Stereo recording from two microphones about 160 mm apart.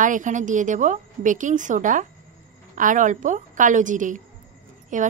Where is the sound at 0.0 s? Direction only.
50° right (ahead or behind).